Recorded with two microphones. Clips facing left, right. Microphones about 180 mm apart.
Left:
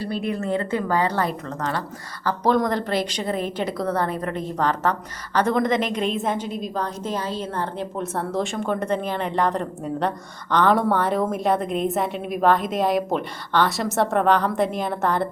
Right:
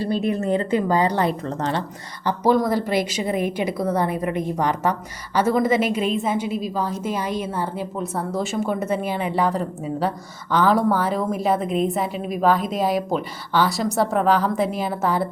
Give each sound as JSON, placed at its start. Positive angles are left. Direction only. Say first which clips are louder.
{"t": 0.2, "sound": "a woman's voice", "louder": "right 3 dB", "side_deg": -20}
{"t": 1.3, "sound": "a woman's voice", "louder": "right 3 dB", "side_deg": -30}
{"t": 2.2, "sound": "a woman's voice", "louder": "right 2 dB", "side_deg": -10}